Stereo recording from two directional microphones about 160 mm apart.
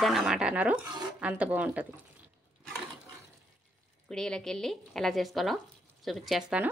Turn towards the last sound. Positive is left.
turn(degrees=0)  # may be behind; listen again after turning